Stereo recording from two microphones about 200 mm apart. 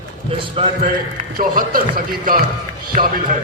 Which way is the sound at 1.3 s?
45° right (ahead or behind).